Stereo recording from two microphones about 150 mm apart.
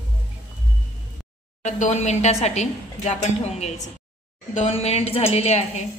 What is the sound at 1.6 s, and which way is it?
A woman's voice, 50° left (ahead or behind).